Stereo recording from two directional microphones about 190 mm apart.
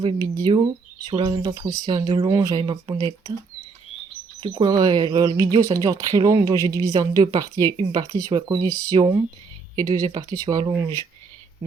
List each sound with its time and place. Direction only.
0.0 s speech: 25° right (ahead or behind)
4.4 s speech: 20° right (ahead or behind)